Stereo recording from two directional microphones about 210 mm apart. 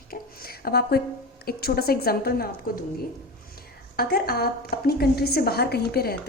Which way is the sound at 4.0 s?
45° left (ahead or behind).